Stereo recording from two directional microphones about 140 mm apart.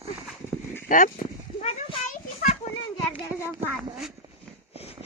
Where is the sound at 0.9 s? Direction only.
70° left (ahead or behind).